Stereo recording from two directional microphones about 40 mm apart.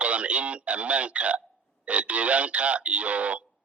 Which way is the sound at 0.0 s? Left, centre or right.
Right.